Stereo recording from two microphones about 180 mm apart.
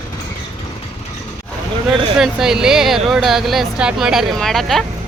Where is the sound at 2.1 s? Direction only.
Centre (ahead or behind).